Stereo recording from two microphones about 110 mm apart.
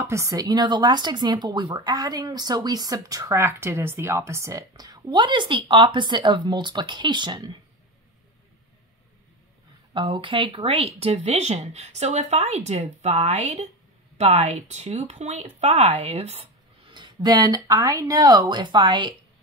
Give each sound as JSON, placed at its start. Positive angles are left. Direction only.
{"t": 0.0, "sound": "speech", "side_deg": -25}
{"t": 9.9, "sound": "speech", "side_deg": -50}
{"t": 16.9, "sound": "speech", "side_deg": -45}